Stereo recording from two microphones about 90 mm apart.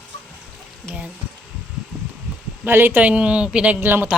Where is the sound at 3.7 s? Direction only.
20° right (ahead or behind).